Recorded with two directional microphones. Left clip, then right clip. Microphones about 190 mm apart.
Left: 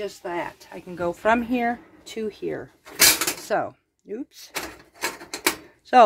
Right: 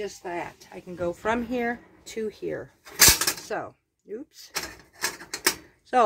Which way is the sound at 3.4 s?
40° left (ahead or behind).